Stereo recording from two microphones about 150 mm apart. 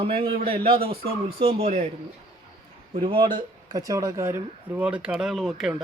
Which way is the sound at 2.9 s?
35° right (ahead or behind).